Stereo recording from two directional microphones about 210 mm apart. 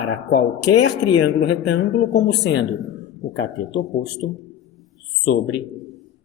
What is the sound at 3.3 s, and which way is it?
Speech, 60° left (ahead or behind).